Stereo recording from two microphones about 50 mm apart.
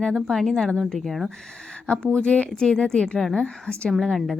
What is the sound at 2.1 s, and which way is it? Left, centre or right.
Speech, left.